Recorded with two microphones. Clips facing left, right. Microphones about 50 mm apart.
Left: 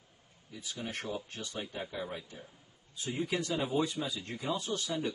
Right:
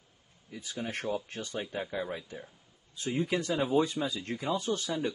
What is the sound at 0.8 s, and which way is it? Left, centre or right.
A man's voice, right.